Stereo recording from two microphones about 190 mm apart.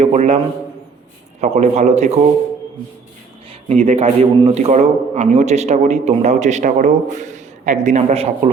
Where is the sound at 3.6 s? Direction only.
35° right (ahead or behind).